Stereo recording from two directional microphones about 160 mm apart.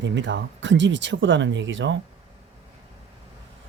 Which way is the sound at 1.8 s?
90° right.